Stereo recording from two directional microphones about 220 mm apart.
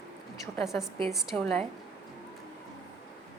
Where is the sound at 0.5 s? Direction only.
Centre (ahead or behind).